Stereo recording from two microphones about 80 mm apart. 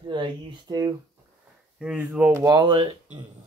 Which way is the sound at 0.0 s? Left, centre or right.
Right.